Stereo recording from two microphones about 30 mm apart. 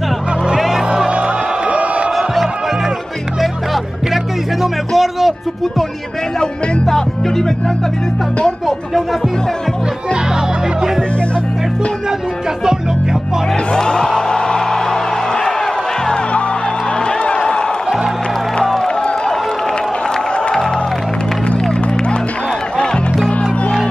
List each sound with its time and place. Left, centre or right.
0.6 s music: centre
1.1 s music: right
2.1 s music: centre
6.9 s speech: centre
8.5 s music: centre
13.7 s music: left
17.0 s music: left
18.6 s music: centre